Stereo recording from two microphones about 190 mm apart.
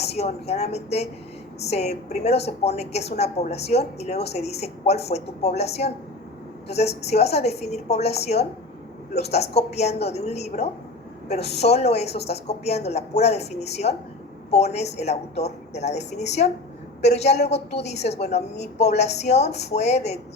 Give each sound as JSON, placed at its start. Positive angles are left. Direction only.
{"t": 0.0, "sound": "a woman's voice", "side_deg": 35}